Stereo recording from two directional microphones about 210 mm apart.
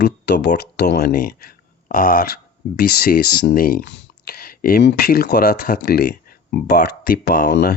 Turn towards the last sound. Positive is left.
turn(degrees=45)  # may be behind; listen again after turning